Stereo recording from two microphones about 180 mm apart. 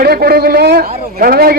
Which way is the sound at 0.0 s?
60° right (ahead or behind).